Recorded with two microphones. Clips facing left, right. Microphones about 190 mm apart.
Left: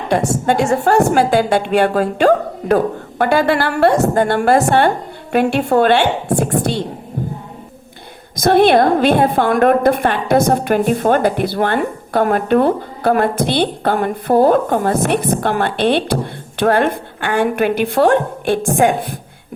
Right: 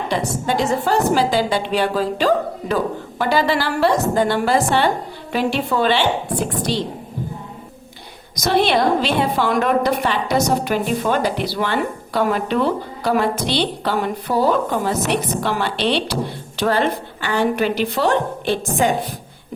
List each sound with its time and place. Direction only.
0.1 s a woman's voice: 60° left (ahead or behind)
4.2 s a woman's voice: 50° left (ahead or behind)
6.5 s a woman's voice: 65° left (ahead or behind)
8.4 s a woman's voice: 50° left (ahead or behind)